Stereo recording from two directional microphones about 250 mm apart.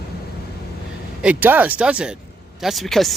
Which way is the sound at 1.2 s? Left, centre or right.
Centre.